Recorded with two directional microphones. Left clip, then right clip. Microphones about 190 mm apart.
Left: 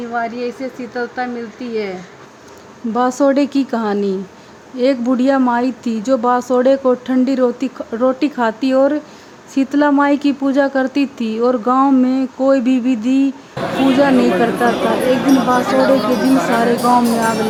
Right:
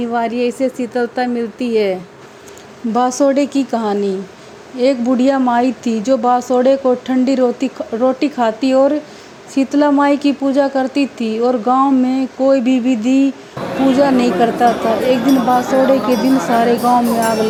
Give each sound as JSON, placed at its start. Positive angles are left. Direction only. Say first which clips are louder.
{"t": 0.1, "sound": "speech", "louder": "right 3 dB", "side_deg": -45}
{"t": 3.2, "sound": "speech", "louder": "even", "side_deg": 10}